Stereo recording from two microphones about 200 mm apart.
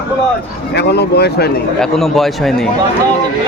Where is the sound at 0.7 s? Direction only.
55° left (ahead or behind).